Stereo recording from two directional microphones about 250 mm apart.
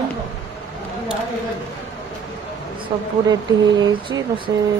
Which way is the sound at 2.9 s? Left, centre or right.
Centre.